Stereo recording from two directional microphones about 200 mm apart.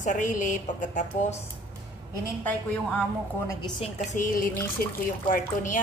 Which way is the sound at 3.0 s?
15° left (ahead or behind).